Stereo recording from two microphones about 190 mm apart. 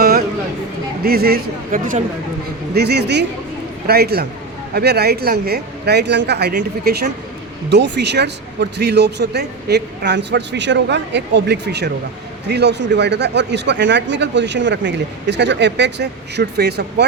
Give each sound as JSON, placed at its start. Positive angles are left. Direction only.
{"t": 0.0, "sound": "a sound", "side_deg": -55}
{"t": 1.0, "sound": "speech", "side_deg": -55}
{"t": 2.7, "sound": "a man's voice", "side_deg": -60}
{"t": 6.5, "sound": "a man's voice", "side_deg": -50}